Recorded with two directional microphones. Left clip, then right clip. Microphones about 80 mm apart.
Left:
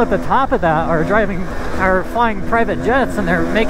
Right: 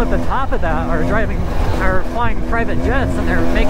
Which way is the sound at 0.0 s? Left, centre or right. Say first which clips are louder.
Left 5 dB; left.